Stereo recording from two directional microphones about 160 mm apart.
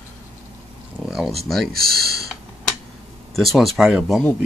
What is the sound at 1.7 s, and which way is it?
Speech, 75° right (ahead or behind).